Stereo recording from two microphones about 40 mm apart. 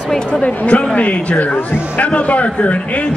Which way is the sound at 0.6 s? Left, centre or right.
Left.